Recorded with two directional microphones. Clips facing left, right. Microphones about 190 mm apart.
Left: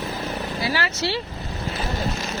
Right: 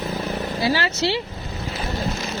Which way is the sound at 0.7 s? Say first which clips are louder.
Right 3 dB; 25° right (ahead or behind).